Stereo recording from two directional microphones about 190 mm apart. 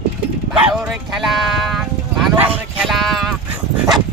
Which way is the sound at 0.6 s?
5° right (ahead or behind).